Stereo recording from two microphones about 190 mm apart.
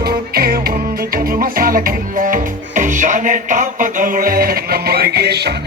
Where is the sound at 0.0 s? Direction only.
55° right (ahead or behind).